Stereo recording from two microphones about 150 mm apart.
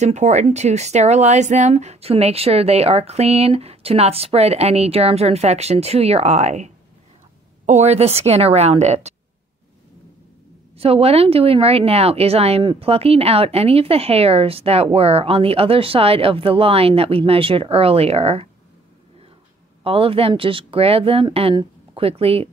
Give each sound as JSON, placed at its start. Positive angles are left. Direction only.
{"t": 0.0, "sound": "speech", "side_deg": -50}
{"t": 10.8, "sound": "a woman's voice", "side_deg": -40}
{"t": 19.8, "sound": "a woman's voice", "side_deg": -40}